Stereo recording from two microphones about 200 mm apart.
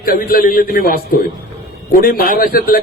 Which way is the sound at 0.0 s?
45° left (ahead or behind).